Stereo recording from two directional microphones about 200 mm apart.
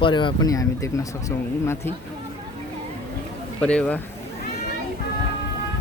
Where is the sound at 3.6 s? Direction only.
5° left (ahead or behind).